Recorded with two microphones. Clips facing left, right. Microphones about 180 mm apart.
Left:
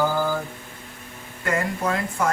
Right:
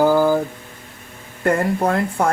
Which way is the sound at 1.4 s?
55° right (ahead or behind).